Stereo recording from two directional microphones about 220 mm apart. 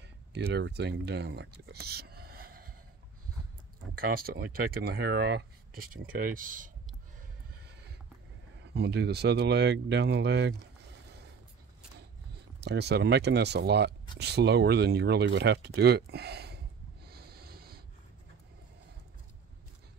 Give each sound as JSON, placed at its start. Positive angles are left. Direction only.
{"t": 0.0, "sound": "speech", "side_deg": -50}
{"t": 3.9, "sound": "speech", "side_deg": -40}
{"t": 8.7, "sound": "speech", "side_deg": -50}
{"t": 12.6, "sound": "speech", "side_deg": -50}
{"t": 17.0, "sound": "a sound", "side_deg": -45}